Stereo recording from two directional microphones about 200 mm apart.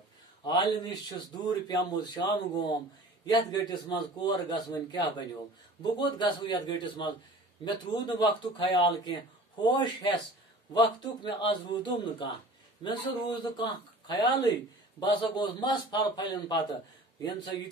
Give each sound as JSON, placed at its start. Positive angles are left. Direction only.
{"t": 0.5, "sound": "speech", "side_deg": 20}